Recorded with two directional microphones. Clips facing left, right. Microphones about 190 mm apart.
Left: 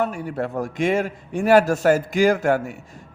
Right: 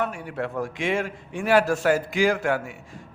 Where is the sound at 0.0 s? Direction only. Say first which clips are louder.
Left 4 dB; 40° left (ahead or behind).